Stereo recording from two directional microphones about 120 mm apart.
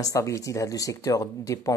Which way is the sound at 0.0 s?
25° left (ahead or behind).